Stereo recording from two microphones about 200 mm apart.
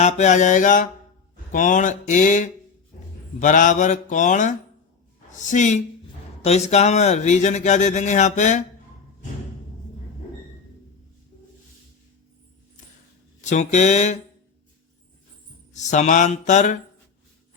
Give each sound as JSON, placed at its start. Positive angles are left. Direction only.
{"t": 0.0, "sound": "speech", "side_deg": 35}
{"t": 13.4, "sound": "speech", "side_deg": 35}
{"t": 15.7, "sound": "speech", "side_deg": 35}